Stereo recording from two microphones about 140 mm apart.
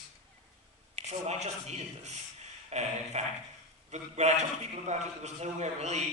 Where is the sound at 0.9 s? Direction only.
50° right (ahead or behind).